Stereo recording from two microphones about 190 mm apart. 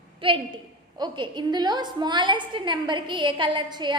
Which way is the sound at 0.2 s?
25° right (ahead or behind).